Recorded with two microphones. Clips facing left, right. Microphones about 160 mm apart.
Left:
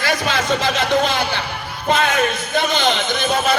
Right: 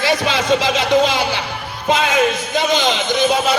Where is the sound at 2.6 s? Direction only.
55° left (ahead or behind).